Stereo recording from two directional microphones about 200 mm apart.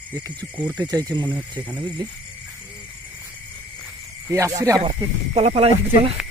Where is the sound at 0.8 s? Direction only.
20° right (ahead or behind).